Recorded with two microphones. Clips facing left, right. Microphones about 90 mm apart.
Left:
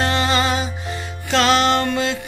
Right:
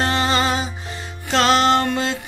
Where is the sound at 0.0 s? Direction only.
35° right (ahead or behind).